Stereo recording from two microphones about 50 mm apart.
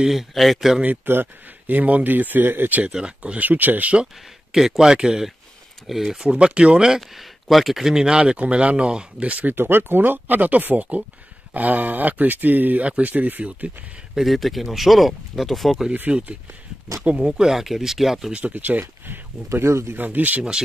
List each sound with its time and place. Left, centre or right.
0.0 s speech: centre
1.0 s speech: right
2.9 s speech: centre
3.4 s speech: right
4.0 s speech: centre
6.3 s speech: right
7.0 s speech: centre; by 13.7 s right
14.2 s speech: centre
16.1 s speech: right
17.3 s speech: centre
18.3 s speech: right
19.6 s speech: right
20.0 s speech: right